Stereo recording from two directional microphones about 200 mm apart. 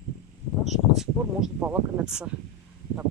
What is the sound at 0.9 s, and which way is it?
Speech, 5° right (ahead or behind).